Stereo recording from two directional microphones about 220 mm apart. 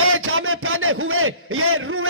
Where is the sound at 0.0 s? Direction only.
70° right (ahead or behind).